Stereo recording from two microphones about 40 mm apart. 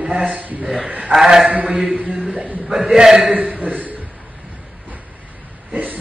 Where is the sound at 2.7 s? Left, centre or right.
Centre.